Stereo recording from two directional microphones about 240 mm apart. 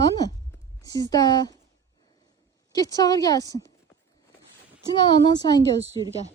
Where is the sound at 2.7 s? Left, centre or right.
Centre.